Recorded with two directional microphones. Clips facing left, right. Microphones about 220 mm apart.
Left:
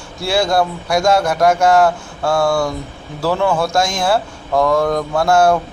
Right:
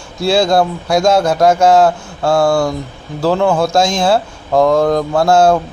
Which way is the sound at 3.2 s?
20° right (ahead or behind).